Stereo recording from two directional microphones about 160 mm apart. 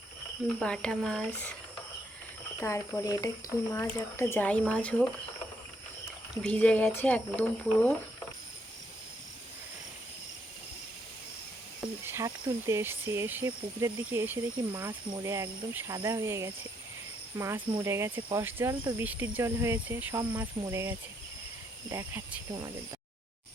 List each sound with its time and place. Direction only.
0.6 s speech: 5° left (ahead or behind)
2.6 s speech: 20° left (ahead or behind)
6.4 s speech: 10° left (ahead or behind)
12.0 s speech: 15° right (ahead or behind)